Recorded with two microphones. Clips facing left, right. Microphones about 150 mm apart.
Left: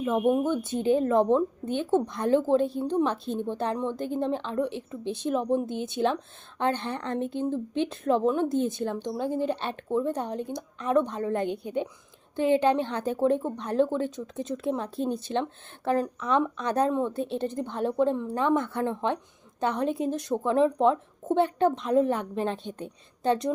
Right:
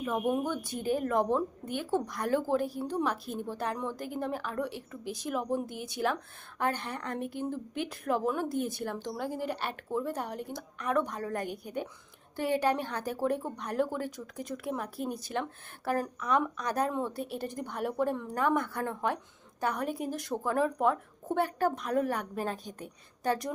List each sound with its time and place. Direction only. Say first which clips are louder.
0.0 s speech: left 6 dB; 20° left (ahead or behind)